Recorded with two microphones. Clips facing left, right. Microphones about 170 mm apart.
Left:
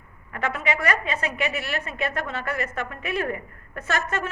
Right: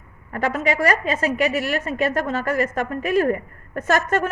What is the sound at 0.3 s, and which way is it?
A woman's voice, 40° right (ahead or behind).